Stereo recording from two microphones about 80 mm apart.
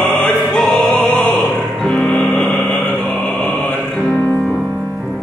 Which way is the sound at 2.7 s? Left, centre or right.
Centre.